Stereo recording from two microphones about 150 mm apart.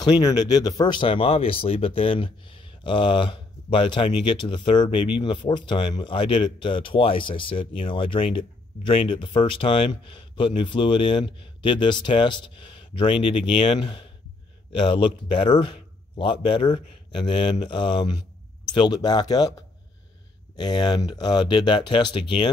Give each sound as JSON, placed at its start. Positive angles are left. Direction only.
{"t": 0.0, "sound": "a man's voice", "side_deg": 25}
{"t": 20.5, "sound": "speech", "side_deg": 30}